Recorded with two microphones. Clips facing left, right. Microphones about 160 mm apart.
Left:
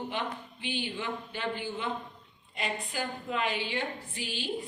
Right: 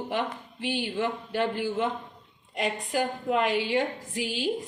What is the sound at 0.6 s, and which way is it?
Speech, 75° right (ahead or behind).